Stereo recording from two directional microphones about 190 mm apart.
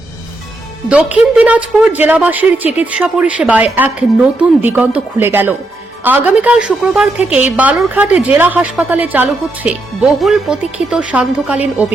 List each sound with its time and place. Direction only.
0.9 s a woman's voice: 5° right (ahead or behind)